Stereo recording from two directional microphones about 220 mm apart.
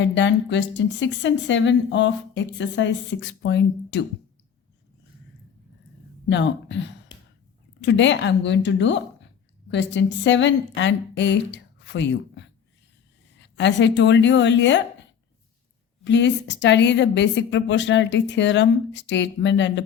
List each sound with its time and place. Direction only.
0.0 s speech: 55° left (ahead or behind)
6.3 s a woman's voice: 55° left (ahead or behind)
16.0 s speech: 55° left (ahead or behind)